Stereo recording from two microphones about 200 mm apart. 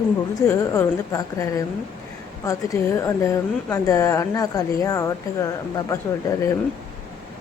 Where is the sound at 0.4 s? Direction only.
10° left (ahead or behind).